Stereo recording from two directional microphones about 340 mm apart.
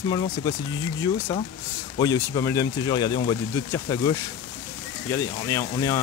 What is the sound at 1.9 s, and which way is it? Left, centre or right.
Speech, centre.